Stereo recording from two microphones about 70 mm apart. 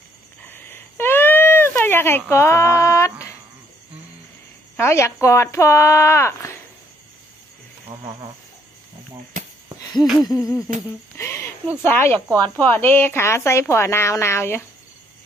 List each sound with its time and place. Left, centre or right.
0.5 s a sound: left
4.7 s speech: left
7.9 s speech: right
10.2 s hoot: left
11.1 s a sound: left
11.8 s speech: left